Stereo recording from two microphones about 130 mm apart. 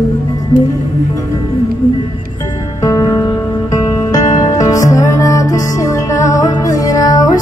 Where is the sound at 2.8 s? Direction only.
25° left (ahead or behind).